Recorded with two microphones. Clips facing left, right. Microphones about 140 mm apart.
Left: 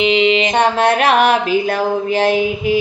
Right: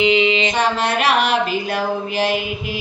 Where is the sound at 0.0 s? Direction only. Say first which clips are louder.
Left 2 dB; 25° left (ahead or behind).